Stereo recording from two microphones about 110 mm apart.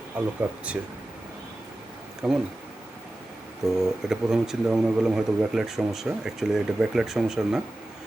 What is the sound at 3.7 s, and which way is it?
Speech, 5° right (ahead or behind).